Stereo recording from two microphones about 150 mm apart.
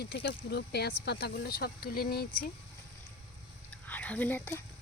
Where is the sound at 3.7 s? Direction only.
10° left (ahead or behind).